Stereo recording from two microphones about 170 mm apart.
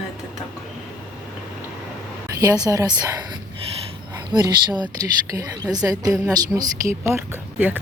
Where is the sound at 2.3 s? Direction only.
20° right (ahead or behind).